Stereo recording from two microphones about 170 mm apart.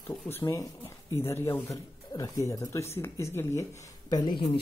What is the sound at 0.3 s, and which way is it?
Speech, 15° left (ahead or behind).